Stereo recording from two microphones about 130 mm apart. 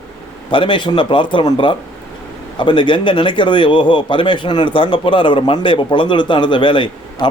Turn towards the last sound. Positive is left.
turn(degrees=40)  # may be behind; listen again after turning